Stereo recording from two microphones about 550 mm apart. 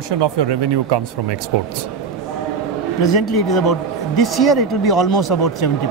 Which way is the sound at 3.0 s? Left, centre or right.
Left.